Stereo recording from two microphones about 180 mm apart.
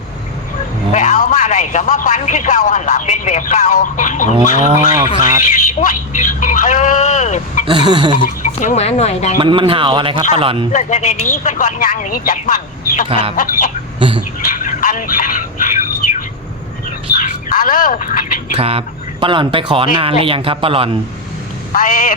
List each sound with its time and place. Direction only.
0.9 s a man's voice: 45° left (ahead or behind)
7.7 s speech: 25° right (ahead or behind)
8.6 s speech: 40° left (ahead or behind)
9.4 s a man's voice: 30° right (ahead or behind)
10.7 s a man's voice: 40° left (ahead or behind)
13.1 s a man's voice: 30° right (ahead or behind)
13.3 s a man's voice: 50° left (ahead or behind)
14.5 s a sound: 45° left (ahead or behind)
17.1 s bird: 50° left (ahead or behind)
18.5 s a man's voice: 30° right (ahead or behind)
21.7 s a man's voice: 50° left (ahead or behind)